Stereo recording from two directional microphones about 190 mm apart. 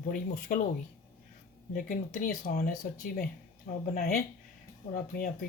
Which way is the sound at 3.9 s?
50° left (ahead or behind).